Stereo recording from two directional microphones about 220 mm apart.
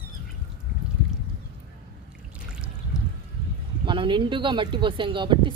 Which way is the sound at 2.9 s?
5° right (ahead or behind).